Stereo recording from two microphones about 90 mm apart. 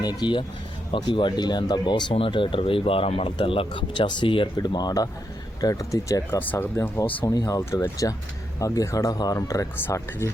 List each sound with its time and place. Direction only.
0.0 s speech: 50° left (ahead or behind); by 4.4 s 70° left (ahead or behind)
4.5 s speech: 50° left (ahead or behind)
6.4 s speech: 20° left (ahead or behind)
6.7 s speech: 30° left (ahead or behind)
7.3 s speech: 40° left (ahead or behind)